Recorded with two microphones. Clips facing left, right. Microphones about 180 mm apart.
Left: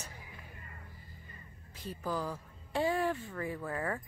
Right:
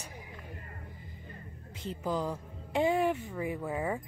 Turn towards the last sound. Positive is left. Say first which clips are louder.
# right 3 dB
turn(degrees=-10)  # may be behind; listen again after turning